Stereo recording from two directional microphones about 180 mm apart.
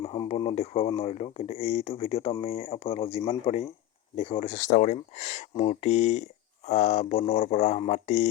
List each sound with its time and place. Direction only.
0.0 s speech: 30° left (ahead or behind)